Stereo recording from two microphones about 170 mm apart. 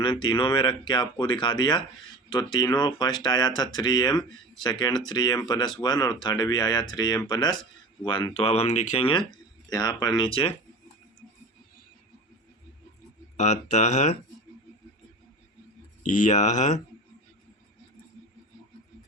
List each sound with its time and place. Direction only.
0.0 s speech: 30° left (ahead or behind)
13.3 s speech: 45° left (ahead or behind)
16.0 s speech: 50° left (ahead or behind)